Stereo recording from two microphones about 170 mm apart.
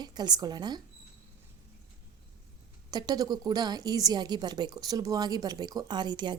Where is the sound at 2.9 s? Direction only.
25° right (ahead or behind).